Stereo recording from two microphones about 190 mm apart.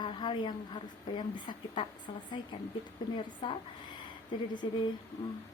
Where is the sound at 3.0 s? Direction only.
20° left (ahead or behind).